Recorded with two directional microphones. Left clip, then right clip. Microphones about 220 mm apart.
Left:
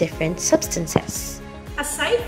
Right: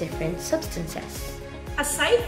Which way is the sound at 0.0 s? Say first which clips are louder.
Left 7 dB; 40° left (ahead or behind).